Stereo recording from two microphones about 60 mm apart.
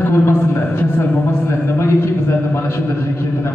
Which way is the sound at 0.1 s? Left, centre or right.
Left.